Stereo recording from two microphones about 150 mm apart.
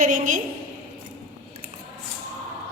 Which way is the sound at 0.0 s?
60° right (ahead or behind).